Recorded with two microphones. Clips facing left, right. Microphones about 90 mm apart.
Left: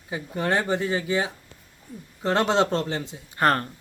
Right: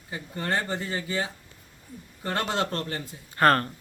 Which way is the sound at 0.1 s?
15° left (ahead or behind).